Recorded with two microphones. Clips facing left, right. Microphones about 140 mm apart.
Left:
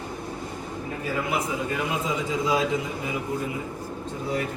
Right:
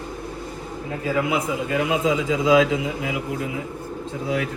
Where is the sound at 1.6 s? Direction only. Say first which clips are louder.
Right 6 dB; 90° right.